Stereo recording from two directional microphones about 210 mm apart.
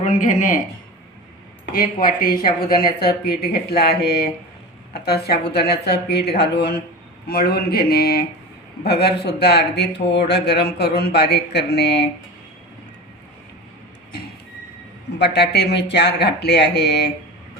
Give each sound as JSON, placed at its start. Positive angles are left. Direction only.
{"t": 0.0, "sound": "a man's voice", "side_deg": 35}
{"t": 1.7, "sound": "speech", "side_deg": 45}
{"t": 15.2, "sound": "speech", "side_deg": 50}